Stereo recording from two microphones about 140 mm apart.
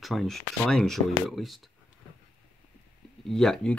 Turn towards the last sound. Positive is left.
turn(degrees=5)  # may be behind; listen again after turning